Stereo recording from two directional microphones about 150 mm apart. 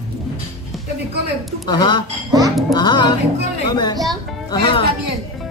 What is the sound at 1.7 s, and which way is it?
Speech, 30° left (ahead or behind).